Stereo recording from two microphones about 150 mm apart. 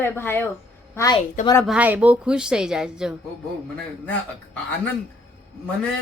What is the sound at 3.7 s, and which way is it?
A woman's voice, 10° left (ahead or behind).